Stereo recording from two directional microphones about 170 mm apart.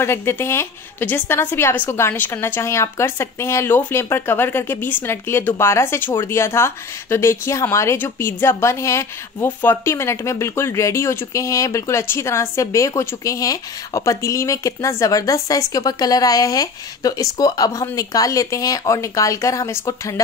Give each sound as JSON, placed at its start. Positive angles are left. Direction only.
{"t": 0.0, "sound": "speech", "side_deg": 15}